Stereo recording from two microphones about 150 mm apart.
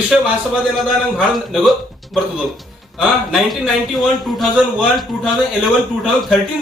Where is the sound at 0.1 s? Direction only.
Centre (ahead or behind).